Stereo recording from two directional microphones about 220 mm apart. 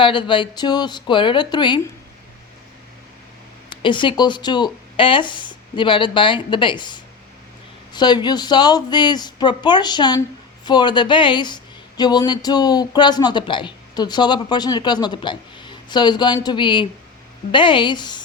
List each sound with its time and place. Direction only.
0.0 s speech: 20° left (ahead or behind)
3.8 s speech: 20° left (ahead or behind)